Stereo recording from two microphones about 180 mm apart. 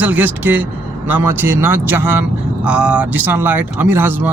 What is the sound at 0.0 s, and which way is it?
A man's voice, 10° right (ahead or behind).